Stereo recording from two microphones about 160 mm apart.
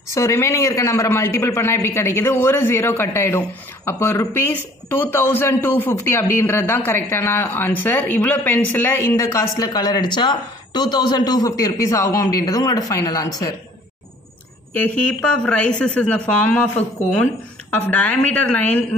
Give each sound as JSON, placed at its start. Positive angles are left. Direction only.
{"t": 0.1, "sound": "a man's voice", "side_deg": 20}
{"t": 14.7, "sound": "a man's voice", "side_deg": 10}